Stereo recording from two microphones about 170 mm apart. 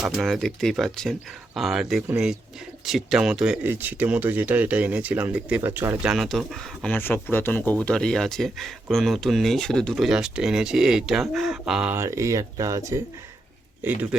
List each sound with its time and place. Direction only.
0.2 s speech: centre (ahead or behind)
6.1 s speech: centre (ahead or behind)
11.9 s speech: 15° right (ahead or behind)
13.8 s speech: 10° right (ahead or behind)